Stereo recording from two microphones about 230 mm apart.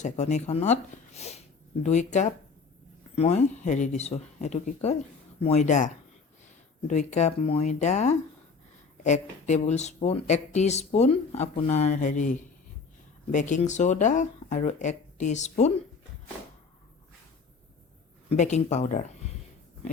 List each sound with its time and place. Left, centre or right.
0.0 s speech: left
9.5 s speech: left
18.3 s speech: left